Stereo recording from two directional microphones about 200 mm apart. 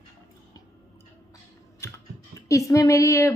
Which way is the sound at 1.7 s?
15° left (ahead or behind).